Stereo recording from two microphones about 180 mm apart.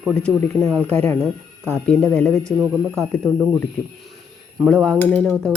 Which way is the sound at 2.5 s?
20° right (ahead or behind).